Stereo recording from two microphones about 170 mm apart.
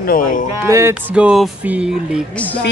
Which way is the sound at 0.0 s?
55° left (ahead or behind).